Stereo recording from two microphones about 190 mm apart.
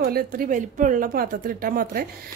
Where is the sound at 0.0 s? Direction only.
50° right (ahead or behind).